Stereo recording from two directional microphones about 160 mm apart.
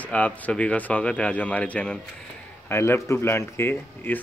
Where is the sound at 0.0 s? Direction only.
10° left (ahead or behind).